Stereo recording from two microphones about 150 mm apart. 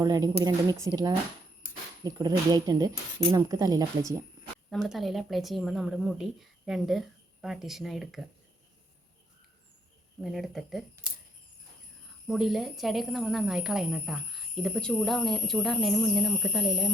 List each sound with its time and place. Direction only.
0.0 s speech: 25° right (ahead or behind)
4.7 s speech: centre (ahead or behind)
10.2 s speech: centre (ahead or behind)
12.3 s speech: centre (ahead or behind)